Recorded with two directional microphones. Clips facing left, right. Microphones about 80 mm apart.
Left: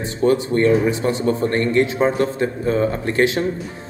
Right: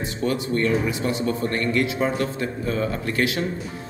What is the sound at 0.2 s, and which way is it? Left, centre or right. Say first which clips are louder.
Speech: left 7 dB; left.